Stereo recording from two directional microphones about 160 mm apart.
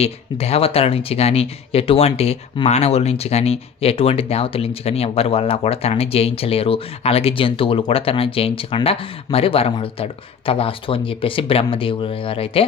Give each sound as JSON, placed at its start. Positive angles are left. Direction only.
{"t": 0.0, "sound": "speech", "side_deg": 40}